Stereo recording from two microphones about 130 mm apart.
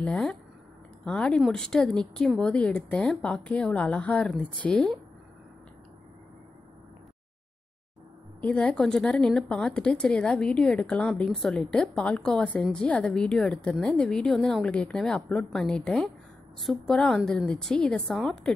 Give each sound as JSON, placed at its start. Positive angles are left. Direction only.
{"t": 0.0, "sound": "speech", "side_deg": 5}
{"t": 8.4, "sound": "speech", "side_deg": 10}